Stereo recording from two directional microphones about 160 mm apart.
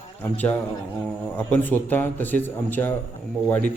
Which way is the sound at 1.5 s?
10° left (ahead or behind).